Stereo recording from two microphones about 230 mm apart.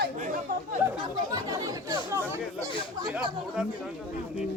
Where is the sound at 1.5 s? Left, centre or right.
Centre.